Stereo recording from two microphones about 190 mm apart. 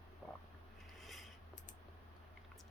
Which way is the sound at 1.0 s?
Centre (ahead or behind).